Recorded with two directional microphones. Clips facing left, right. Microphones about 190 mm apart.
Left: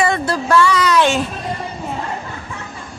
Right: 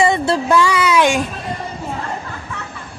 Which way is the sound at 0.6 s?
10° right (ahead or behind).